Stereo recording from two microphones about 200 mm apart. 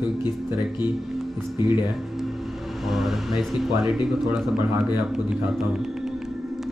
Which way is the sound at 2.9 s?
Centre (ahead or behind).